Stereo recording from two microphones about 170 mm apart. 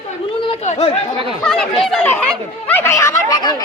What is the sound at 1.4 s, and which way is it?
Chatter, 5° left (ahead or behind).